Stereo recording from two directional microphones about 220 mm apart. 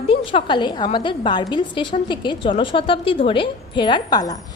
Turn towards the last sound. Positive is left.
turn(degrees=15)  # may be behind; listen again after turning